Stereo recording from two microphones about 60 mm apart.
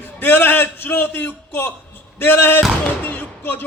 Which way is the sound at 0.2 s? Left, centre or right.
Left.